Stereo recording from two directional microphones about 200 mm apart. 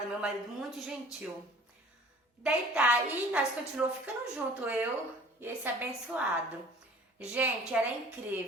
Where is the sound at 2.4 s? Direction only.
5° right (ahead or behind).